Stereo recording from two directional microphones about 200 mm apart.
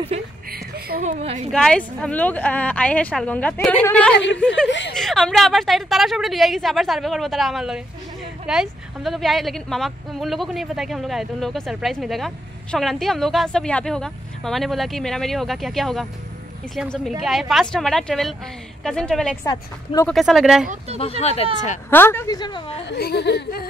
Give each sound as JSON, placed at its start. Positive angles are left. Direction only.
{"t": 0.1, "sound": "a sound", "side_deg": -30}
{"t": 0.5, "sound": "a sound", "side_deg": -50}
{"t": 1.5, "sound": "speech", "side_deg": 5}
{"t": 4.6, "sound": "speech", "side_deg": 65}
{"t": 4.9, "sound": "a woman's voice", "side_deg": 0}
{"t": 17.1, "sound": "a woman's voice", "side_deg": 0}
{"t": 19.4, "sound": "a woman's voice", "side_deg": 20}
{"t": 20.1, "sound": "a woman's voice", "side_deg": 0}
{"t": 21.2, "sound": "speech", "side_deg": 30}
{"t": 21.9, "sound": "speech", "side_deg": 10}
{"t": 22.8, "sound": "speech", "side_deg": 55}